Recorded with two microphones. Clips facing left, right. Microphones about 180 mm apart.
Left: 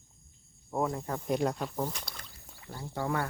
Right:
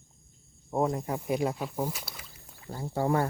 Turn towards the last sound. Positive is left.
turn(degrees=-30)  # may be behind; listen again after turning